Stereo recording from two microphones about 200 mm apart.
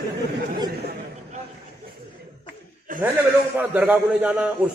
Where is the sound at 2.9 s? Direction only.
45° right (ahead or behind).